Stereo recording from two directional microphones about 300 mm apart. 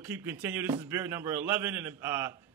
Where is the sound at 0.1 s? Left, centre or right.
Centre.